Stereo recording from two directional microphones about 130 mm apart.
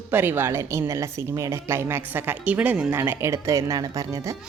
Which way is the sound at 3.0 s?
20° right (ahead or behind).